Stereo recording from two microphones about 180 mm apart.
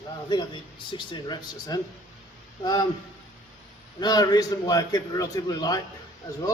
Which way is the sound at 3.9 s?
20° left (ahead or behind).